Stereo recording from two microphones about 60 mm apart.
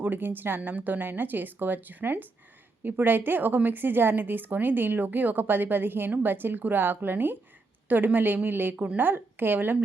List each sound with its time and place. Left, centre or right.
0.0 s a woman's voice: right
8.7 s speech: centre
9.0 s a woman's voice: right